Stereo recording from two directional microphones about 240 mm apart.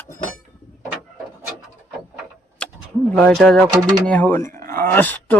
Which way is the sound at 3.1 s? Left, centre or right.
Centre.